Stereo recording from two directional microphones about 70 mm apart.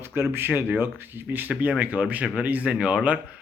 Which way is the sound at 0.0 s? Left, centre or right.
Right.